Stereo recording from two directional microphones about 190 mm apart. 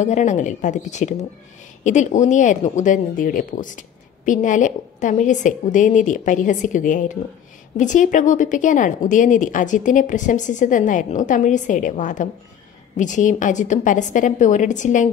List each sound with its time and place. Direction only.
0.0 s speech: 40° left (ahead or behind)